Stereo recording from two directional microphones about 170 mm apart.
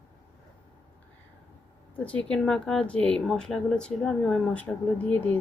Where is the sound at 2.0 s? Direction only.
5° left (ahead or behind).